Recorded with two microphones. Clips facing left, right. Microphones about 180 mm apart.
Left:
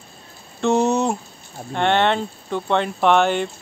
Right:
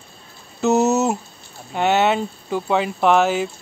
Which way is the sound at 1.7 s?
5° right (ahead or behind).